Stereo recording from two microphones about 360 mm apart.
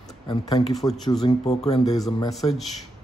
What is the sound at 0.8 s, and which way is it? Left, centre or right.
Speech, centre.